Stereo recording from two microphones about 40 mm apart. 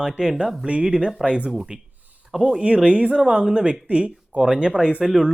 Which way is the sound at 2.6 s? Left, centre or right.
Right.